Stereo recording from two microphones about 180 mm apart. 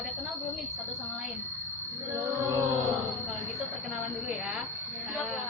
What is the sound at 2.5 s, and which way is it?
Music, 20° right (ahead or behind).